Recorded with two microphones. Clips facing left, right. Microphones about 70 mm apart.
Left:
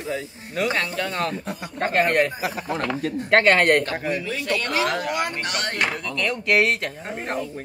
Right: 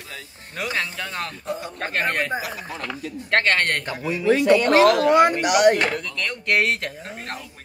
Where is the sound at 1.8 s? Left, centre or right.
Centre.